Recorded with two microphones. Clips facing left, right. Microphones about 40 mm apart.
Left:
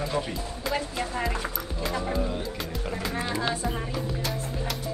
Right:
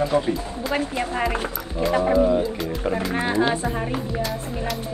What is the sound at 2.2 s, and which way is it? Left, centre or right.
Speech, right.